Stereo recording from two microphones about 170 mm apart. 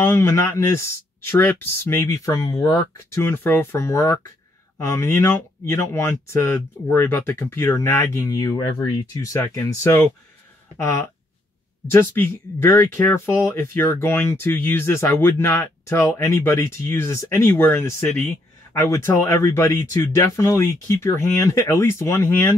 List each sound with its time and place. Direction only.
0.0 s speech: 15° left (ahead or behind)